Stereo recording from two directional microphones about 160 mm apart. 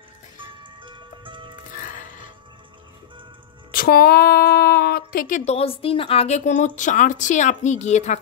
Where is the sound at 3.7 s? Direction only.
70° left (ahead or behind); by 5.5 s 55° left (ahead or behind).